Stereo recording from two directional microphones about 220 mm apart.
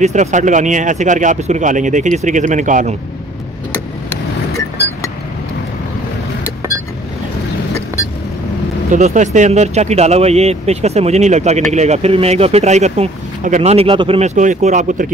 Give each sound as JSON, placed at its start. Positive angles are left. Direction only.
{"t": 0.0, "sound": "speech", "side_deg": -35}
{"t": 8.9, "sound": "speech", "side_deg": -35}